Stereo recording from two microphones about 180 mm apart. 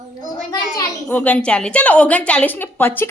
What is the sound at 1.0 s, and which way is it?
A woman's voice, 10° left (ahead or behind).